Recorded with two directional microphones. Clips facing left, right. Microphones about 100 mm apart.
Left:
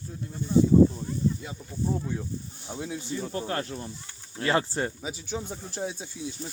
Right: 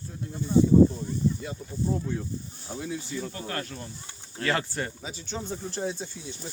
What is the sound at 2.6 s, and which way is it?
Speech, 25° left (ahead or behind).